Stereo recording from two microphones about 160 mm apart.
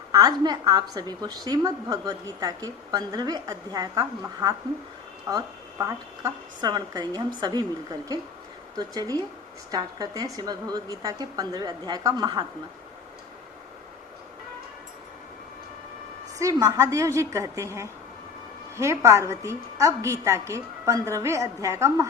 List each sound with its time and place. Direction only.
0.1 s a woman's voice: 25° right (ahead or behind)
8.7 s a woman's voice: 25° right (ahead or behind)
16.4 s a woman's voice: 20° right (ahead or behind)